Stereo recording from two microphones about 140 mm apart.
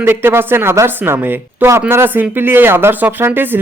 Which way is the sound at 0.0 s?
15° right (ahead or behind).